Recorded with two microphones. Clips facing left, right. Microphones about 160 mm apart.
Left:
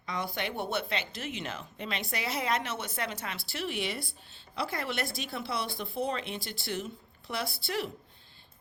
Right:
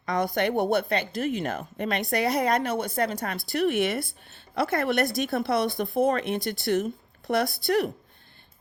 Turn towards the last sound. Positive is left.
turn(degrees=-50)  # may be behind; listen again after turning